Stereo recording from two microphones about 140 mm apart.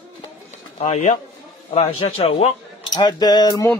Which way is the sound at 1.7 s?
45° left (ahead or behind).